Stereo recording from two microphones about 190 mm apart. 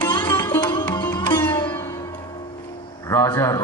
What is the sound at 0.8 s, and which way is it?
Sitar, 10° left (ahead or behind).